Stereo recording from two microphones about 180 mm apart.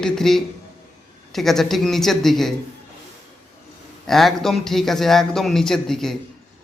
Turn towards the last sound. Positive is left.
turn(degrees=0)  # may be behind; listen again after turning